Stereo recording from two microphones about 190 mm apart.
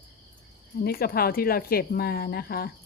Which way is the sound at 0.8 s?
50° left (ahead or behind).